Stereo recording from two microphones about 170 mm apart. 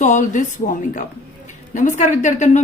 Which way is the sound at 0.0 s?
45° left (ahead or behind).